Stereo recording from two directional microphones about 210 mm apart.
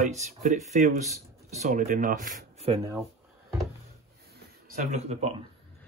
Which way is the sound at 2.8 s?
15° right (ahead or behind).